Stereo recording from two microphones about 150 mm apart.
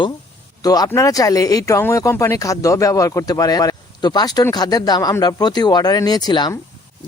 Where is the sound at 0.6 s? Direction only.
25° left (ahead or behind).